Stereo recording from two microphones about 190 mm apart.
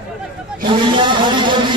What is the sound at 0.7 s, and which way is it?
Speech, 25° right (ahead or behind).